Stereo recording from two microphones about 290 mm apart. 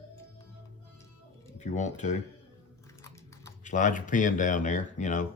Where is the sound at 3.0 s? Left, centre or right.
Centre.